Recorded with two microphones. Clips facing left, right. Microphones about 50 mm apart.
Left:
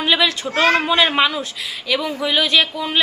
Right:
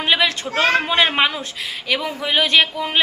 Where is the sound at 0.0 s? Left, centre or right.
Right.